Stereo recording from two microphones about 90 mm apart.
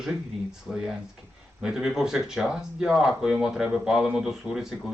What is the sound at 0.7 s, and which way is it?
Speech, 5° right (ahead or behind).